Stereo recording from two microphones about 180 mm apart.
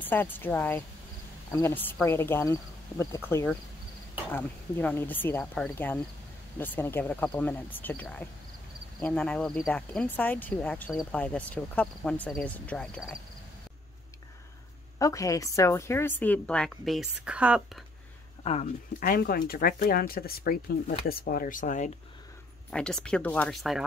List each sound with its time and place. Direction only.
0.0 s speech: 10° left (ahead or behind)
15.0 s speech: 20° left (ahead or behind); by 17.6 s 5° right (ahead or behind)
18.4 s speech: 35° left (ahead or behind)
18.9 s speech: 55° left (ahead or behind)
22.7 s speech: 5° left (ahead or behind)